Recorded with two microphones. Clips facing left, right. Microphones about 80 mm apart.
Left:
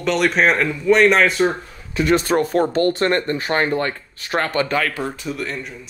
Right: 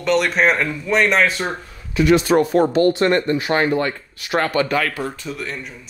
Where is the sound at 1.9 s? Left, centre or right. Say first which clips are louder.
Right 3 dB; left.